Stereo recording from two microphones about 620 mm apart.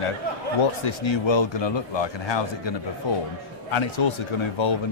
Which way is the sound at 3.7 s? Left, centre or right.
Left.